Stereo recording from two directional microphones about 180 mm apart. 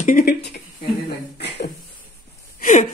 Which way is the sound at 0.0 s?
55° left (ahead or behind).